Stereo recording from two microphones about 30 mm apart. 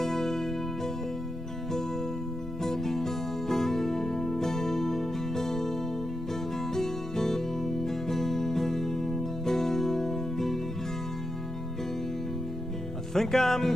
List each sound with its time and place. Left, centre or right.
0.0 s music: centre
2.6 s music: centre
13.1 s music: centre